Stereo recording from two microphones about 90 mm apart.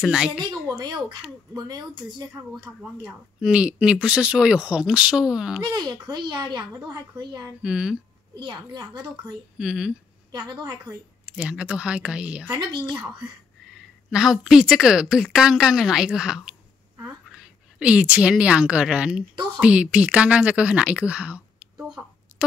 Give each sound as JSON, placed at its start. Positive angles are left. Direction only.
{"t": 0.0, "sound": "speech", "side_deg": -5}
{"t": 0.4, "sound": "a child's voice", "side_deg": -45}
{"t": 3.0, "sound": "speech", "side_deg": -10}
{"t": 5.8, "sound": "a child's voice", "side_deg": -50}
{"t": 7.6, "sound": "speech", "side_deg": -10}
{"t": 8.4, "sound": "a child's voice", "side_deg": -50}
{"t": 9.6, "sound": "speech", "side_deg": -10}
{"t": 11.2, "sound": "speech", "side_deg": -10}
{"t": 14.1, "sound": "a woman's voice", "side_deg": -5}
{"t": 17.3, "sound": "a sound", "side_deg": -10}
{"t": 18.4, "sound": "speech", "side_deg": -10}